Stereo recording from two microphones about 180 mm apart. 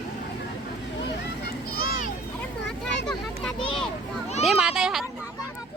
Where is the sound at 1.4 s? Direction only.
55° left (ahead or behind).